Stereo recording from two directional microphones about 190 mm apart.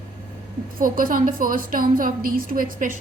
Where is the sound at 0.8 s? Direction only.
45° right (ahead or behind).